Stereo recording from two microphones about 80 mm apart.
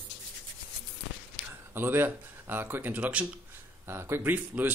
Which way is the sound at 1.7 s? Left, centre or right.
Right.